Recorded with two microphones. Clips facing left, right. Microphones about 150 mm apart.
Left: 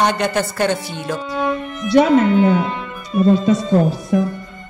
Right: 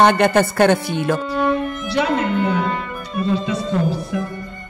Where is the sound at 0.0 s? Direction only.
55° right (ahead or behind).